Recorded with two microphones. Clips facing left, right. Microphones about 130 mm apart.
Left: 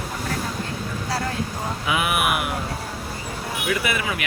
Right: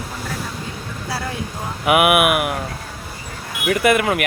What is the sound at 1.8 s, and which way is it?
Speech, 65° right (ahead or behind).